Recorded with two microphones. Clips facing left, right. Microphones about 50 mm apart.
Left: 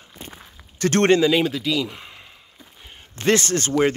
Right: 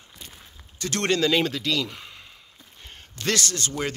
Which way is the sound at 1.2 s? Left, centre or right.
Centre.